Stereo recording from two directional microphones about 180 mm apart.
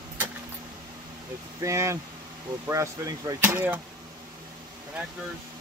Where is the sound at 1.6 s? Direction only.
15° right (ahead or behind).